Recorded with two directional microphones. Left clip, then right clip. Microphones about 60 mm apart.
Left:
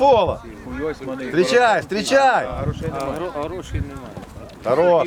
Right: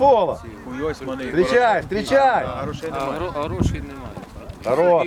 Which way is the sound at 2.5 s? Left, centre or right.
Right.